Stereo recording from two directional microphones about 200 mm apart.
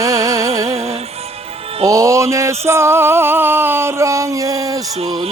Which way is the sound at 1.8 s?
15° right (ahead or behind).